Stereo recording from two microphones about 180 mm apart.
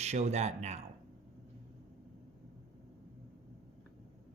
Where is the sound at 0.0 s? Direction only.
40° right (ahead or behind).